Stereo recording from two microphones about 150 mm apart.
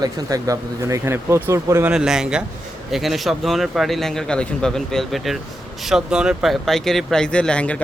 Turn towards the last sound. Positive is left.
turn(degrees=10)  # may be behind; listen again after turning